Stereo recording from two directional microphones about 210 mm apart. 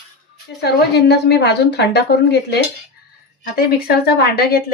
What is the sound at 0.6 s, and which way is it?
A woman's voice, 50° left (ahead or behind).